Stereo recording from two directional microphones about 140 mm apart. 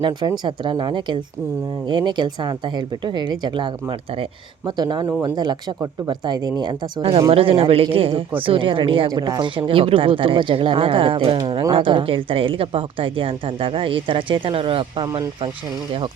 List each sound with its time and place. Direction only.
0.0 s speech: 30° right (ahead or behind)
9.6 s speech: 40° right (ahead or behind)